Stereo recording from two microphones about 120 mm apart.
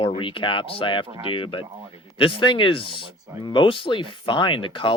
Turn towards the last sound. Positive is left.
turn(degrees=45)  # may be behind; listen again after turning